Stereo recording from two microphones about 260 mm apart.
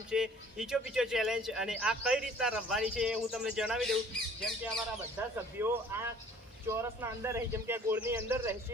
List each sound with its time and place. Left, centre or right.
0.1 s speech: centre
5.5 s speech: centre